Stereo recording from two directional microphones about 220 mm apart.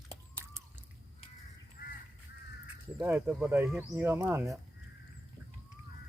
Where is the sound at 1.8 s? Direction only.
40° left (ahead or behind).